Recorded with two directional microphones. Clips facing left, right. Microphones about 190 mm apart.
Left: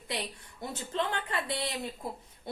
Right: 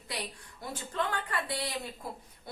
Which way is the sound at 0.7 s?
25° left (ahead or behind).